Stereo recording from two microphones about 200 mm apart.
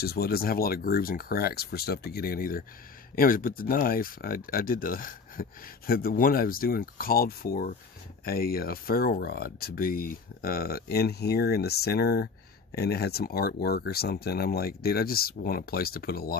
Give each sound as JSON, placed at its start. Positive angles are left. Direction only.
{"t": 0.0, "sound": "speech", "side_deg": 50}